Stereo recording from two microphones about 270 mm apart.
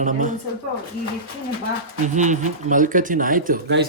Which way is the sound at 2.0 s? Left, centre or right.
Right.